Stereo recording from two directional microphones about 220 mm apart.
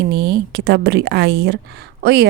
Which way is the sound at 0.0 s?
50° right (ahead or behind).